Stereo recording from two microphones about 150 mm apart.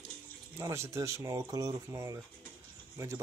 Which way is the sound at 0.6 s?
20° right (ahead or behind).